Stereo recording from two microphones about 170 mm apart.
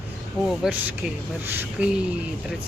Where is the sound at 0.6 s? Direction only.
5° right (ahead or behind).